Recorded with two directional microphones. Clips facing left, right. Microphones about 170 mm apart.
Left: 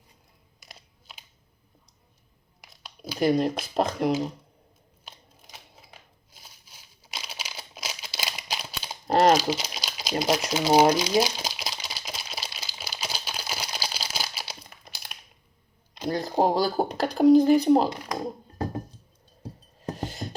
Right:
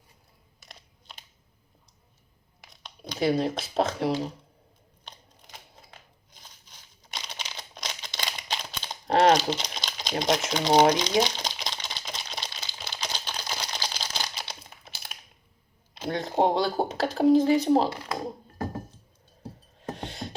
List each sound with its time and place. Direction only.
0.6 s a sound: 5° left (ahead or behind)
2.6 s speech: 5° left (ahead or behind)
5.0 s a sound: 5° left (ahead or behind)
6.3 s crumpling: 10° left (ahead or behind)
16.0 s speech: centre (ahead or behind)
17.8 s speech: 15° left (ahead or behind)
20.0 s music: centre (ahead or behind)